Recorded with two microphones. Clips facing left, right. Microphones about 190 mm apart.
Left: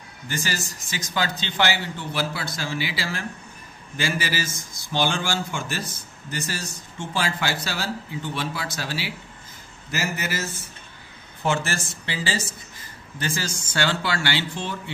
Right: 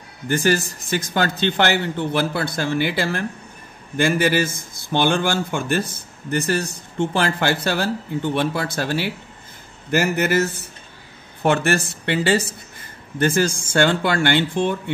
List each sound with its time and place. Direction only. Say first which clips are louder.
0.3 s a man's voice: right 11 dB; 55° right (ahead or behind)